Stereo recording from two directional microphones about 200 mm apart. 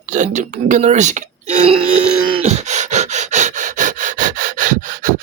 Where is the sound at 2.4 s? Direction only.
35° right (ahead or behind).